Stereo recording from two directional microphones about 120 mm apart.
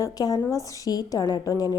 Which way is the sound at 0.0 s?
30° left (ahead or behind).